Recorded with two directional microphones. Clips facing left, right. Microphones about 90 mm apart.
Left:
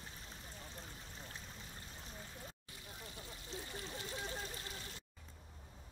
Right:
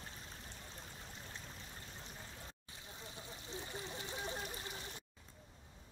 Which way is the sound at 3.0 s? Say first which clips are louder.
Right 2 dB; 20° right (ahead or behind).